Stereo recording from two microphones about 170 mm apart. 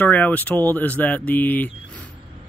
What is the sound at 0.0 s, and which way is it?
Speech, 10° left (ahead or behind).